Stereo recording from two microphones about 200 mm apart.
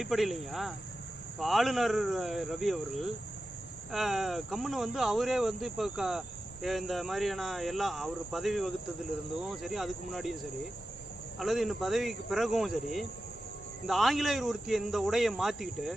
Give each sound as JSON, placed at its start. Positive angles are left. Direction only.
{"t": 0.0, "sound": "speech", "side_deg": 0}
{"t": 11.3, "sound": "speech", "side_deg": 0}